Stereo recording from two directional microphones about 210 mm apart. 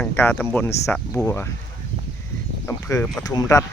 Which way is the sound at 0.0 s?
10° left (ahead or behind).